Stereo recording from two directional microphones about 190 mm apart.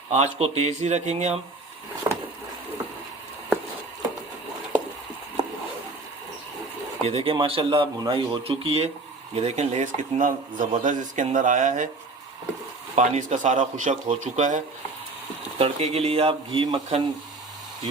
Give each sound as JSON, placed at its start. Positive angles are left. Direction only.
{"t": 0.3, "sound": "speech", "side_deg": -35}
{"t": 2.0, "sound": "a sound", "side_deg": -20}
{"t": 7.0, "sound": "speech", "side_deg": -30}
{"t": 13.0, "sound": "speech", "side_deg": -40}